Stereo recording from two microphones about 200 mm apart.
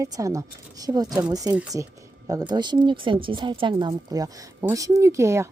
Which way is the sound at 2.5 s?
20° right (ahead or behind).